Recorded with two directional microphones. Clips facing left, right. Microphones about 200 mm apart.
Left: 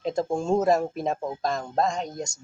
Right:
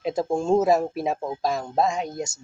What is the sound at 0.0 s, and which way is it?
A man's voice, 5° right (ahead or behind).